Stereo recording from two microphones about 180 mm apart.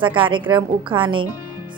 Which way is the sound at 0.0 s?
30° right (ahead or behind).